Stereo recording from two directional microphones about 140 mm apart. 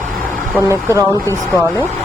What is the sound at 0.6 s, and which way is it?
Speech, 20° right (ahead or behind).